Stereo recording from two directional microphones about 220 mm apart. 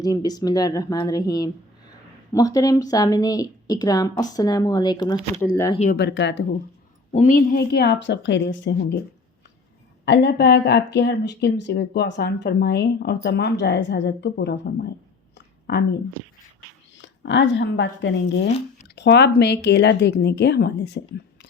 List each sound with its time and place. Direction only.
0.0 s a woman's voice: 15° left (ahead or behind)
6.0 s speech: 50° left (ahead or behind)
7.1 s speech: 35° left (ahead or behind); by 8.7 s 55° left (ahead or behind)
10.1 s speech: 45° left (ahead or behind)
15.4 s a sound: 45° left (ahead or behind)
17.0 s speech: 55° left (ahead or behind)